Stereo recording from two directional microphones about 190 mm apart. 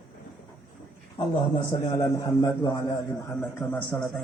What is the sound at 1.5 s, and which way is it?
A man's voice, 30° left (ahead or behind).